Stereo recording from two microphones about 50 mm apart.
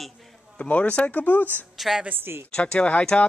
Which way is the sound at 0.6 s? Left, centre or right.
Left.